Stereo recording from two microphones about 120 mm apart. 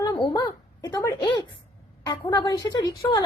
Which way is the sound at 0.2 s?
35° left (ahead or behind).